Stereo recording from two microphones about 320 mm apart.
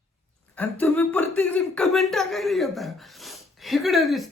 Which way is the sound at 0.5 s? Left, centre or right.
Centre.